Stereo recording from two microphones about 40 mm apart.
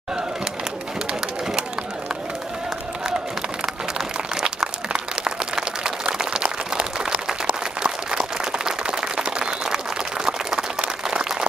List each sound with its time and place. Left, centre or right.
4.4 s applause: right